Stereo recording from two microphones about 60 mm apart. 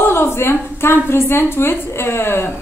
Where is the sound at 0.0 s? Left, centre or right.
Left.